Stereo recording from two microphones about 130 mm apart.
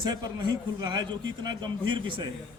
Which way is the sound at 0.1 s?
30° right (ahead or behind).